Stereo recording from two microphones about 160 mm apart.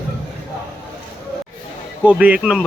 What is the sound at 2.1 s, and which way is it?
Speech, 10° right (ahead or behind).